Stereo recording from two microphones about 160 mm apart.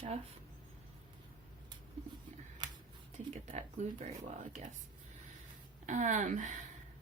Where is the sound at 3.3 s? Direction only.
45° right (ahead or behind).